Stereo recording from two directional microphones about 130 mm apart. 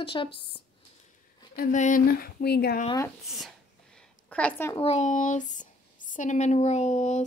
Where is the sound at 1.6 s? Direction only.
75° left (ahead or behind).